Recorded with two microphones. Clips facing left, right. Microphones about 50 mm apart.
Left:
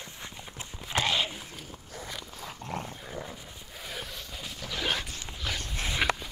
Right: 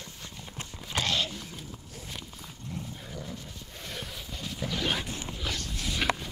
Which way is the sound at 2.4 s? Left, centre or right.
Left.